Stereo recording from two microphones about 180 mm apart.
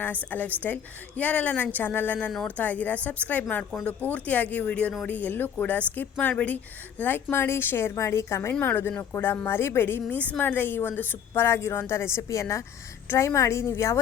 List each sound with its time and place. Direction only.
0.0 s a woman's voice: 10° left (ahead or behind)